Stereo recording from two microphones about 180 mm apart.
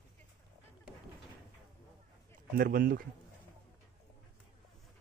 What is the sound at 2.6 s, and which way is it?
Speech, 55° right (ahead or behind).